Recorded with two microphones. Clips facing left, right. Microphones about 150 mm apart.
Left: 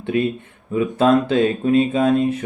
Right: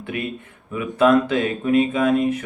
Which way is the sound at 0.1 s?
30° left (ahead or behind).